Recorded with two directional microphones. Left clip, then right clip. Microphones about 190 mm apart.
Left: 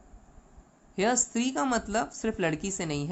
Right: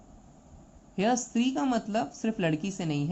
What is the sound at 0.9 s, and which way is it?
A woman's voice, 50° left (ahead or behind).